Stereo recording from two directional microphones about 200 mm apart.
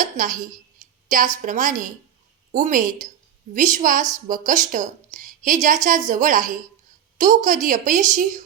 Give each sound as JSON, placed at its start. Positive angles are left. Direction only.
{"t": 0.2, "sound": "a woman's voice", "side_deg": -40}